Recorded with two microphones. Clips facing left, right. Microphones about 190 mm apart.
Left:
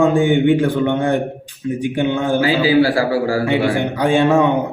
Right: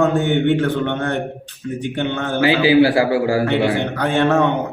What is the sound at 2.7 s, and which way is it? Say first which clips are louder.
Speech: right 2 dB; 20° right (ahead or behind).